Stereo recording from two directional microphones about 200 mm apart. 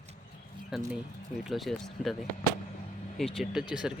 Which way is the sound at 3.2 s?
Centre (ahead or behind).